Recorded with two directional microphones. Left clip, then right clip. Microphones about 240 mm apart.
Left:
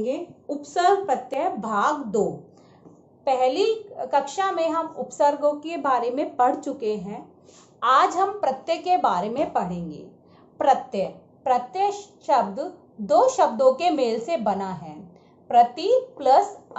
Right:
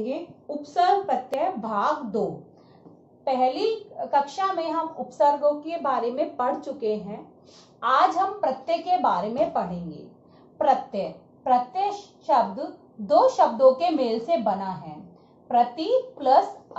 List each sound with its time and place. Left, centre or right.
0.6 s a woman's voice: left
3.3 s a woman's voice: left